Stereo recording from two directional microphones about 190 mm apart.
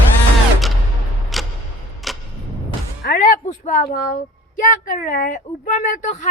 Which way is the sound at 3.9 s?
45° left (ahead or behind).